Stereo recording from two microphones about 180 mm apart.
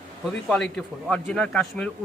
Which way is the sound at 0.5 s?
Centre (ahead or behind).